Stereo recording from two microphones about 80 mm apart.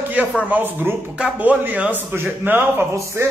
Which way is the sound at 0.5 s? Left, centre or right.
Right.